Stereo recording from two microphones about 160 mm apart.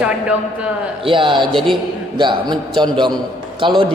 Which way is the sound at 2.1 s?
30° right (ahead or behind).